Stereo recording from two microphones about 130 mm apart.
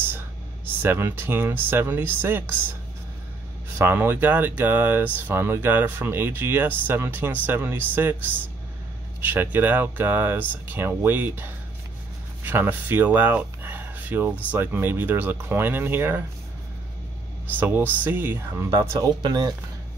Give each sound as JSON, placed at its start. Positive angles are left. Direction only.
{"t": 0.8, "sound": "speech", "side_deg": -15}
{"t": 3.7, "sound": "speech", "side_deg": -20}
{"t": 17.6, "sound": "speech", "side_deg": -15}